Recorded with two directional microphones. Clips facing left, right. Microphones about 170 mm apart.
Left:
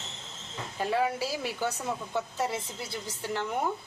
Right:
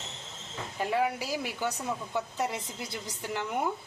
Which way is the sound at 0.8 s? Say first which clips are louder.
Left 1 dB; 15° right (ahead or behind).